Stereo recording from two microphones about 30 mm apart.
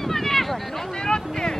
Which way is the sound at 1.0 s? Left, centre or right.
Left.